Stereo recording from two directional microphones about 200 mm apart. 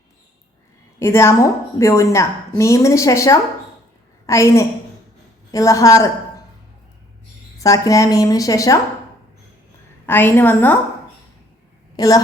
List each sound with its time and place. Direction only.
0.9 s a woman's voice: 15° left (ahead or behind)
7.6 s a woman's voice: 15° left (ahead or behind)
10.1 s a woman's voice: 10° left (ahead or behind)
11.9 s a woman's voice: 15° left (ahead or behind)